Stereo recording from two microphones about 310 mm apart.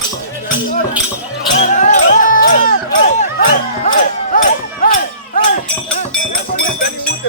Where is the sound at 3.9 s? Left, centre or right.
Left.